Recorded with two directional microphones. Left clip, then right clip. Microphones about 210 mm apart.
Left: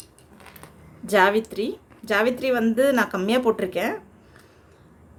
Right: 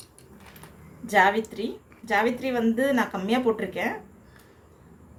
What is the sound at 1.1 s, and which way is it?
A woman's voice, 55° left (ahead or behind).